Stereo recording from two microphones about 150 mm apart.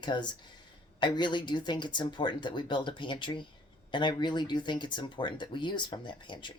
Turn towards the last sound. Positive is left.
turn(degrees=30)  # may be behind; listen again after turning